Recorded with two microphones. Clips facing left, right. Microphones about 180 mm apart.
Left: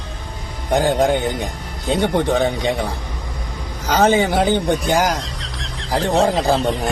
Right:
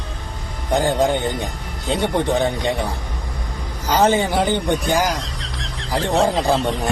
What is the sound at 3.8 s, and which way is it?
Speech, 15° right (ahead or behind).